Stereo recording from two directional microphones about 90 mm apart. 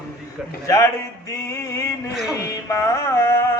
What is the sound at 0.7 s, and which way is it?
Mantra, 35° left (ahead or behind).